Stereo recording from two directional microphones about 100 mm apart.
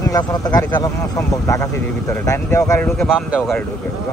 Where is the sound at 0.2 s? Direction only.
45° left (ahead or behind).